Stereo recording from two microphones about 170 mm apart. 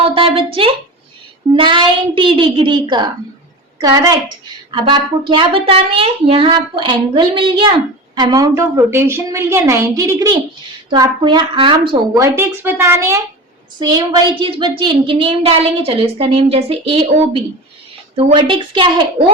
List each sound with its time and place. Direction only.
0.1 s a woman's voice: 30° right (ahead or behind); by 13.2 s 15° right (ahead or behind)
13.7 s a woman's voice: 25° right (ahead or behind)